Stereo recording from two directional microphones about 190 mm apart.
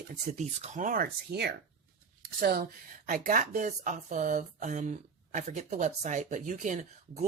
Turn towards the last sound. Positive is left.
turn(degrees=-40)  # may be behind; listen again after turning